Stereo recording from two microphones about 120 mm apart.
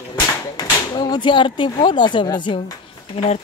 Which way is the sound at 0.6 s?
35° left (ahead or behind).